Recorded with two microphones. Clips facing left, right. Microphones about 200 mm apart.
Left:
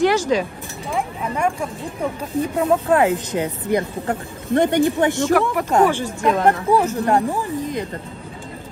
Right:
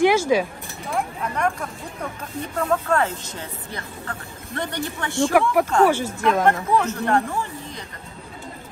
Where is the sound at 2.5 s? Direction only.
15° left (ahead or behind).